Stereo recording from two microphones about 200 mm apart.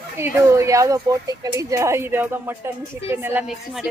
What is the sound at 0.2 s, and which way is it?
A woman's voice, 10° right (ahead or behind).